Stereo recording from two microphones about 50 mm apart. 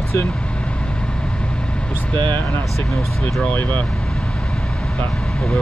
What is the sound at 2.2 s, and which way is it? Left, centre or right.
Speech, left.